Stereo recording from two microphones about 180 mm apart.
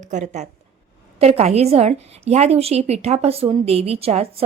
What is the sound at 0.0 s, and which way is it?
A woman's voice, 40° right (ahead or behind).